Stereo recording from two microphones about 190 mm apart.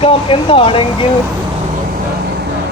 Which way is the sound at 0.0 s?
30° left (ahead or behind).